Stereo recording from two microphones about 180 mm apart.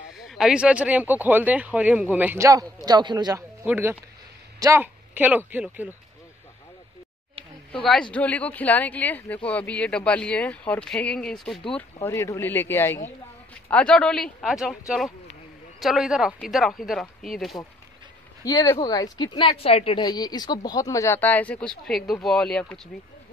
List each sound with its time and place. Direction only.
0.3 s speech: 5° right (ahead or behind); by 3.4 s 25° right (ahead or behind)
3.6 s speech: 10° right (ahead or behind)
7.7 s speech: 5° left (ahead or behind)
11.7 s speech: 15° left (ahead or behind)
18.4 s speech: 20° left (ahead or behind)